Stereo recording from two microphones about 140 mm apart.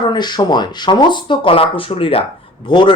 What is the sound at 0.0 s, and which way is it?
Speech, 30° left (ahead or behind).